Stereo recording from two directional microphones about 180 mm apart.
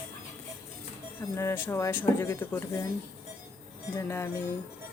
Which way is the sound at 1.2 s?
15° left (ahead or behind).